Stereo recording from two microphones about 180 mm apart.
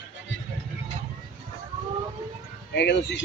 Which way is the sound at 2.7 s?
70° left (ahead or behind).